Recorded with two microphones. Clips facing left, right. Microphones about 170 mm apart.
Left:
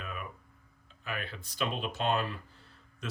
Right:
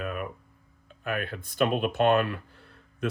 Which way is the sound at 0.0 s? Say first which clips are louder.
Right 9 dB; 55° right (ahead or behind).